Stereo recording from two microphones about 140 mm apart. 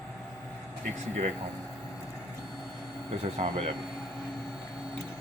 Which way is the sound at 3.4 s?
60° right (ahead or behind).